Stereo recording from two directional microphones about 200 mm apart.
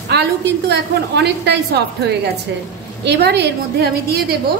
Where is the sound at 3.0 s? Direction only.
55° right (ahead or behind).